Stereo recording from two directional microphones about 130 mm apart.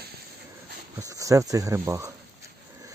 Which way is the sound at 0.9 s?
25° right (ahead or behind).